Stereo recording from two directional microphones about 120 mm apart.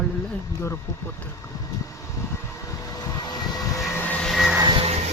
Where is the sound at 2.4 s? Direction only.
25° left (ahead or behind).